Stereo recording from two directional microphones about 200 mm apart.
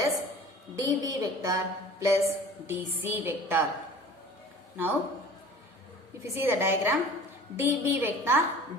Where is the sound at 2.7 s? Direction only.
10° right (ahead or behind).